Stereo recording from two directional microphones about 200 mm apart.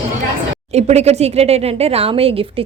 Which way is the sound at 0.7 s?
30° right (ahead or behind).